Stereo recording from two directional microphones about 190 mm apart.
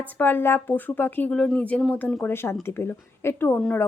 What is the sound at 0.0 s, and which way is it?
A woman's voice, 10° left (ahead or behind).